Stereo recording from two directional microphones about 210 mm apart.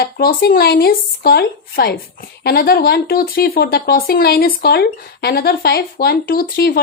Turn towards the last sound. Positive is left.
turn(degrees=45)  # may be behind; listen again after turning